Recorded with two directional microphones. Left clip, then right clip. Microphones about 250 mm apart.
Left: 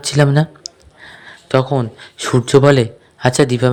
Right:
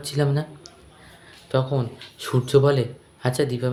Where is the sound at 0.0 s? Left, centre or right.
Left.